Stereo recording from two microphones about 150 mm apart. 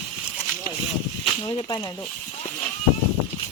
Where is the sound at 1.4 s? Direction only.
30° left (ahead or behind).